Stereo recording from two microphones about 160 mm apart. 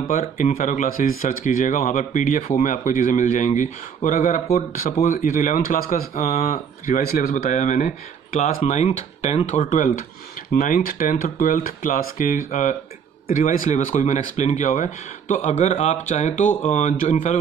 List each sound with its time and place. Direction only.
0.1 s speech: 60° left (ahead or behind)